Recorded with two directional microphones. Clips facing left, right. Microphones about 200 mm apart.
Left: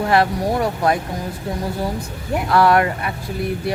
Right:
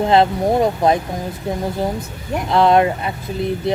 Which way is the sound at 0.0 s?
20° right (ahead or behind).